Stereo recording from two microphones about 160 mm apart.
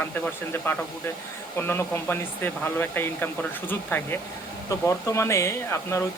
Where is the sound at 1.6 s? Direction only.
15° left (ahead or behind).